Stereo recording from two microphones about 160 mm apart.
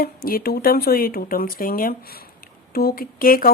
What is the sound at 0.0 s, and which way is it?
Speech, 65° left (ahead or behind).